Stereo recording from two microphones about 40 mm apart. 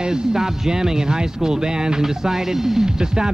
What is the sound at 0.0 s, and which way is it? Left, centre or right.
Speech, centre.